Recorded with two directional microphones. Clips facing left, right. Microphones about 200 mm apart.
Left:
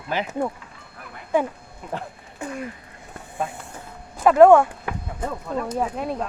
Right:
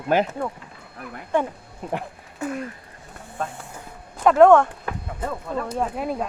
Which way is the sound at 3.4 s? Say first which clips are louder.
Left 1 dB; 10° left (ahead or behind).